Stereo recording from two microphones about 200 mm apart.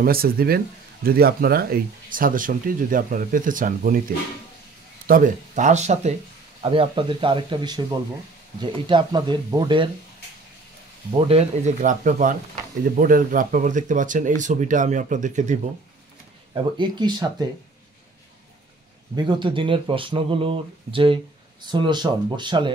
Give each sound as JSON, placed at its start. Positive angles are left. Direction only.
{"t": 0.0, "sound": "speech", "side_deg": -50}
{"t": 5.0, "sound": "speech", "side_deg": -45}
{"t": 11.1, "sound": "speech", "side_deg": -30}
{"t": 16.5, "sound": "speech", "side_deg": -25}
{"t": 19.1, "sound": "speech", "side_deg": -20}